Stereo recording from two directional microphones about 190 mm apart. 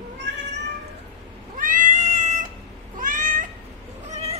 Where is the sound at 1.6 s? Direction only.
40° right (ahead or behind).